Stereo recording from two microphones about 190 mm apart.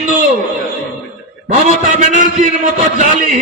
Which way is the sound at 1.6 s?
40° right (ahead or behind).